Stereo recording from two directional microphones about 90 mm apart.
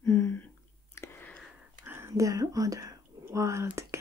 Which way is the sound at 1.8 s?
30° right (ahead or behind).